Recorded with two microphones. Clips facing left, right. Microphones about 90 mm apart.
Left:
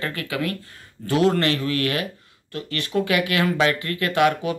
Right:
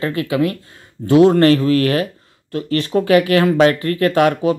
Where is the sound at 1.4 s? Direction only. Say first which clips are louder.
Right 10 dB; 35° right (ahead or behind).